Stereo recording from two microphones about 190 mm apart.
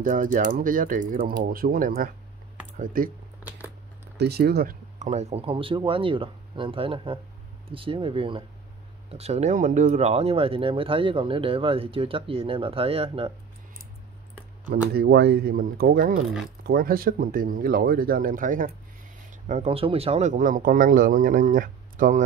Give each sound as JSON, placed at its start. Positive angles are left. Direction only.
{"t": 0.0, "sound": "speech", "side_deg": -45}
{"t": 4.2, "sound": "speech", "side_deg": -60}
{"t": 4.9, "sound": "speech", "side_deg": -40}
{"t": 15.0, "sound": "speech", "side_deg": -60}